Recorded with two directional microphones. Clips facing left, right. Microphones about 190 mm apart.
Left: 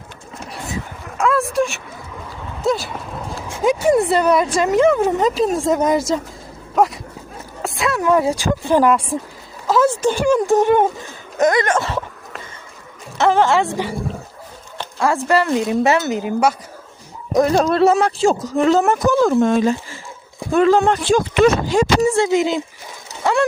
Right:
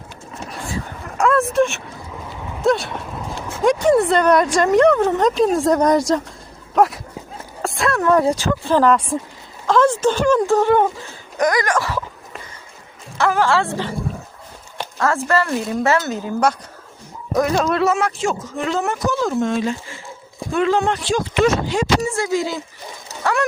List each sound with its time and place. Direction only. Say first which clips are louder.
1.2 s a sound: right 1 dB; 5° left (ahead or behind)
2.6 s dog: right 2 dB; centre (ahead or behind)
3.5 s speech: even; 5° left (ahead or behind); by 12.0 s 25° left (ahead or behind)
13.1 s speech: left 3 dB; 20° left (ahead or behind)
14.9 s speech: left 2 dB; 15° left (ahead or behind)
17.4 s speech: left 4 dB; 35° left (ahead or behind); by 19.7 s 55° left (ahead or behind)
20.5 s speech: left 4 dB; 40° left (ahead or behind)
22.1 s speech: left 5 dB; 25° left (ahead or behind)